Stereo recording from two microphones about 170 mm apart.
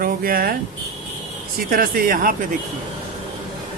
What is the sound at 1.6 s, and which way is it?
Speech, 60° right (ahead or behind).